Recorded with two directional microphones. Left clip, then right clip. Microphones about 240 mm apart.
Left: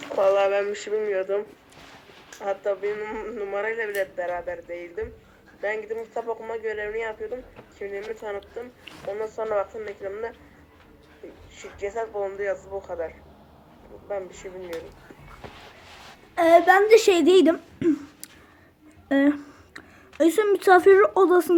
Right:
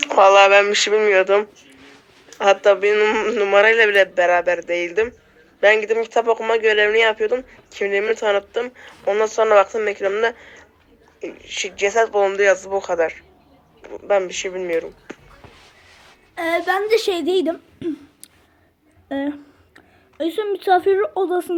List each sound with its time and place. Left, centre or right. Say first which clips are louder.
0.0 s speech: right 10 dB; right
11.9 s speech: right 13 dB; right
16.3 s a child's voice: left 4 dB; centre
19.0 s a child's voice: left 4 dB; centre